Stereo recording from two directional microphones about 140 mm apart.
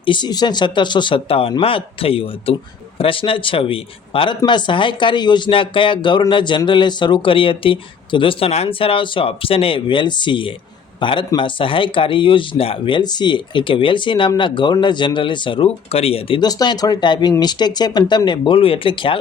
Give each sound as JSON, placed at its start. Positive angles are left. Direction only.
{"t": 0.0, "sound": "speech", "side_deg": 35}
{"t": 16.4, "sound": "speech", "side_deg": 30}